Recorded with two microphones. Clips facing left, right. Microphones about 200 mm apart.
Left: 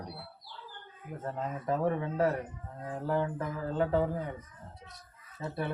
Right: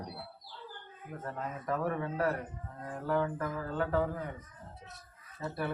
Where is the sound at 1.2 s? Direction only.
25° left (ahead or behind).